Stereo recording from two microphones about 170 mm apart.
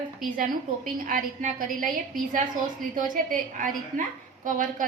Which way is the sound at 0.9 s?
55° right (ahead or behind).